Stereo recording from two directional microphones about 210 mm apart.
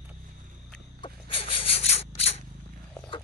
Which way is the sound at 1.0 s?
25° left (ahead or behind).